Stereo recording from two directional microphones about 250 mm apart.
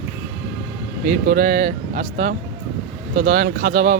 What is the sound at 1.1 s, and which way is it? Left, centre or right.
Speech, right.